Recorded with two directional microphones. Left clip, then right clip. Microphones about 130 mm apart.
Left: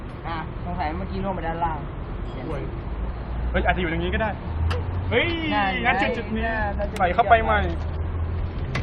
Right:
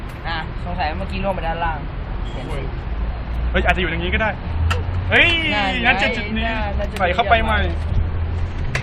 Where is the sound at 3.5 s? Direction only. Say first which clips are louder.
Right 4 dB; 15° left (ahead or behind).